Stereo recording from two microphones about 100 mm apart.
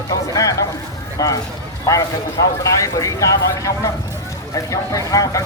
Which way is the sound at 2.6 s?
30° left (ahead or behind).